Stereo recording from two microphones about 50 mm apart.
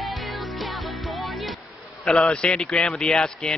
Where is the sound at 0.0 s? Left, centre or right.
Centre.